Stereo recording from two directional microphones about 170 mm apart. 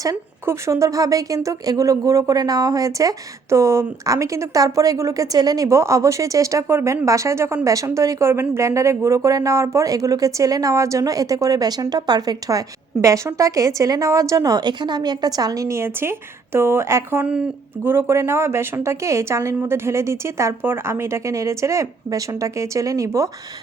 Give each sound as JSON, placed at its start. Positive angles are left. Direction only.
{"t": 0.0, "sound": "a woman's voice", "side_deg": -20}